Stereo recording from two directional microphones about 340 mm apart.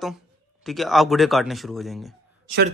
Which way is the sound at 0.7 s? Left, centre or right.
Centre.